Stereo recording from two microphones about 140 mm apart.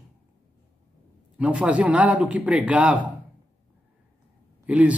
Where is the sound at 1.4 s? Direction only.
10° right (ahead or behind).